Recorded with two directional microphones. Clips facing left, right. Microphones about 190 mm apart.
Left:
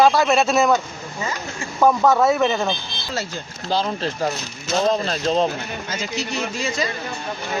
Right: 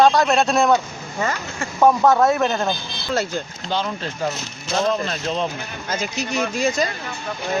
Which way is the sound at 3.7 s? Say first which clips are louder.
Left 3 dB; 35° left (ahead or behind).